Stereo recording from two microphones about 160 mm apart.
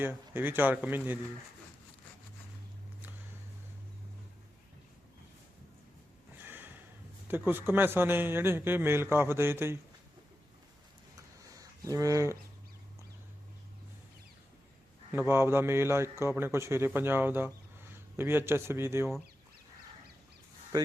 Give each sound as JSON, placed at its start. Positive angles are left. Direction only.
{"t": 0.0, "sound": "a man's voice", "side_deg": -10}
{"t": 6.4, "sound": "snort", "side_deg": -10}
{"t": 7.3, "sound": "a man's voice", "side_deg": -10}
{"t": 11.4, "sound": "a sound", "side_deg": -20}
{"t": 15.1, "sound": "a man's voice", "side_deg": -15}